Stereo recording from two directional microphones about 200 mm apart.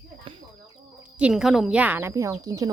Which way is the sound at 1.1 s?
5° right (ahead or behind).